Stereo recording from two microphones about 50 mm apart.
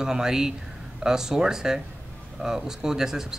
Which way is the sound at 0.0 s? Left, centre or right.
Centre.